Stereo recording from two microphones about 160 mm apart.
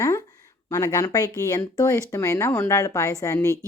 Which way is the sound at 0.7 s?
20° left (ahead or behind).